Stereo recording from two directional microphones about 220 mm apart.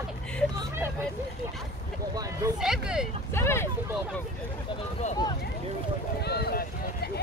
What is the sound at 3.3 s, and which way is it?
Speech, 10° left (ahead or behind).